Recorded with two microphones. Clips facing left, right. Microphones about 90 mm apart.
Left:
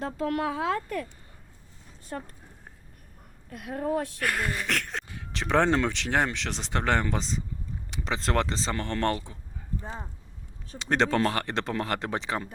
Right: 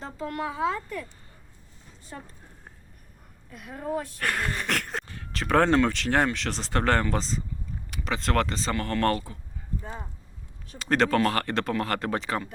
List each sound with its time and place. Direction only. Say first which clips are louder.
0.0 s speech: left 4 dB; 70° left (ahead or behind)
3.5 s a woman's voice: left 4 dB; 65° left (ahead or behind)
4.2 s a sound: even; 5° left (ahead or behind)
5.0 s speech: right 2 dB; 10° left (ahead or behind)
7.9 s speech: right 1 dB; 25° left (ahead or behind)
10.8 s speech: right 2 dB; 20° left (ahead or behind)